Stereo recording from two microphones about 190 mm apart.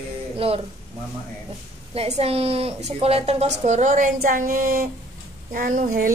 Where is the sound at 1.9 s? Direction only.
35° right (ahead or behind).